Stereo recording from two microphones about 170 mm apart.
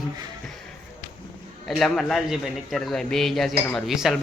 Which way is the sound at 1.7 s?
Centre (ahead or behind).